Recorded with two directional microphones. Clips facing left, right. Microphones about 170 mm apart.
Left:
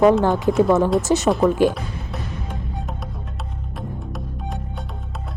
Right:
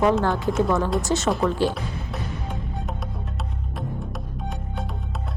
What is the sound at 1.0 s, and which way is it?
Speech, 15° left (ahead or behind).